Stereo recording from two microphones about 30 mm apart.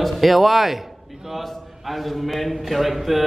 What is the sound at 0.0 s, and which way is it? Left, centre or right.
A man's voice, centre.